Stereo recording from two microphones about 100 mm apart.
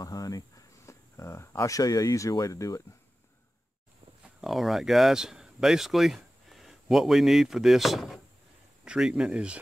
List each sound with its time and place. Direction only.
0.0 s speech: 40° left (ahead or behind)
4.2 s speech: 5° right (ahead or behind)